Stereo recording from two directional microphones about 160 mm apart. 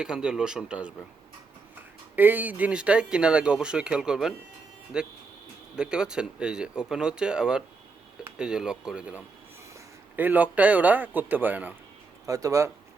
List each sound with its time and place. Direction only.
0.0 s speech: 5° right (ahead or behind)
2.1 s a man's voice: 10° right (ahead or behind)